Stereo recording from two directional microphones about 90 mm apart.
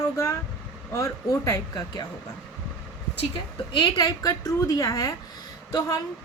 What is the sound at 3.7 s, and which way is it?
Speech, 65° left (ahead or behind).